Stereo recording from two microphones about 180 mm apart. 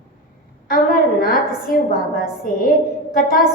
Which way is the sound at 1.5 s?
55° left (ahead or behind).